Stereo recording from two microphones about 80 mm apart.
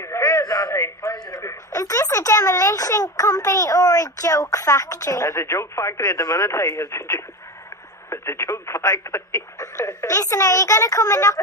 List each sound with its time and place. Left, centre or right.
0.0 s a sound: left
1.1 s radio: left
1.4 s speech: left